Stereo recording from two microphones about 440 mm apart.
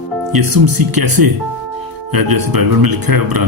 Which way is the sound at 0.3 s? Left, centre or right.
Right.